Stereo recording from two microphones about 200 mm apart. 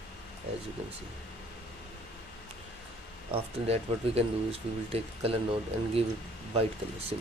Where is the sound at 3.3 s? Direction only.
30° right (ahead or behind).